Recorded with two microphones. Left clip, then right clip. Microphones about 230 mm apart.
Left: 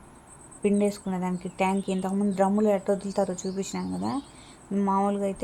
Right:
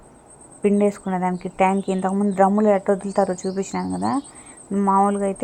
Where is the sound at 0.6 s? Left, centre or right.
Centre.